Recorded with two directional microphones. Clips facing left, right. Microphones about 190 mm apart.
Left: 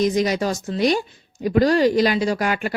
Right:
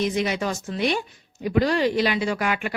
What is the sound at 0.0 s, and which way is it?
Speech, 40° left (ahead or behind).